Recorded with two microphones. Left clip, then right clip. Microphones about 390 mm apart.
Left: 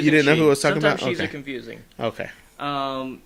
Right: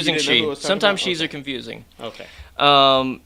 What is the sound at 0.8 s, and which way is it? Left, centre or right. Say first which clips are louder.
Speech: right 2 dB; right.